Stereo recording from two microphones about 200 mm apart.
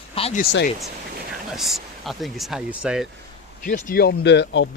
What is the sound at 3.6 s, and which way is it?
Speech, 45° left (ahead or behind).